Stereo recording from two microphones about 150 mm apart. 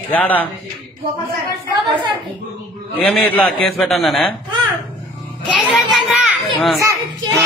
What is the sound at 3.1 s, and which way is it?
A man's voice, 10° left (ahead or behind).